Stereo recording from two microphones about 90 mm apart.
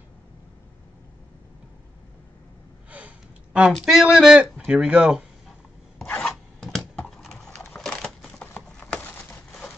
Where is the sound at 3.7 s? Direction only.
5° right (ahead or behind).